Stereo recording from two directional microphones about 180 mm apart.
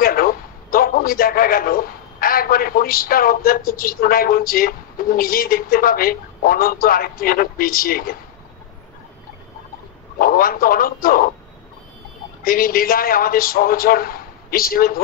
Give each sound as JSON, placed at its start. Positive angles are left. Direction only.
{"t": 0.0, "sound": "a man's voice", "side_deg": 55}
{"t": 10.1, "sound": "a man's voice", "side_deg": 55}
{"t": 12.4, "sound": "a man's voice", "side_deg": 55}